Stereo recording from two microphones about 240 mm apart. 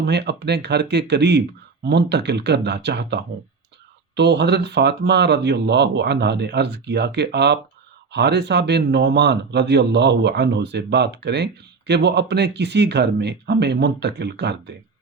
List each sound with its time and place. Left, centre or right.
0.0 s speech: right